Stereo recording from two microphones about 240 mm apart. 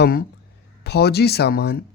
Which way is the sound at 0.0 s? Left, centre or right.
Left.